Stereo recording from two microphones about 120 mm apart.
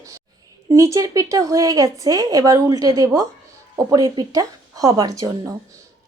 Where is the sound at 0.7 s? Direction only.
25° right (ahead or behind).